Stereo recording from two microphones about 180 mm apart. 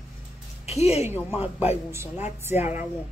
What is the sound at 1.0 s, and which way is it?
Speech, 10° right (ahead or behind).